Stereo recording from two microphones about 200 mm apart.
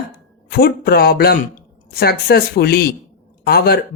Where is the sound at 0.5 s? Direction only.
50° left (ahead or behind).